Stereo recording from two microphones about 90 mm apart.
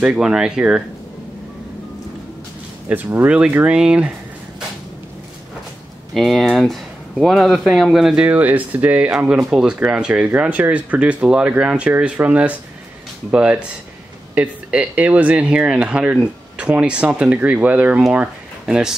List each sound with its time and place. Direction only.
0.0 s speech: 10° right (ahead or behind)
2.9 s speech: 25° right (ahead or behind)
6.1 s speech: centre (ahead or behind)